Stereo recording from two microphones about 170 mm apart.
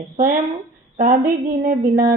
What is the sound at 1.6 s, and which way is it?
Speech, 55° right (ahead or behind).